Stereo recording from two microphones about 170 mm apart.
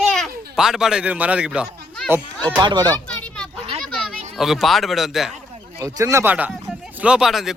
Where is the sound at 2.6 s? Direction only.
25° right (ahead or behind).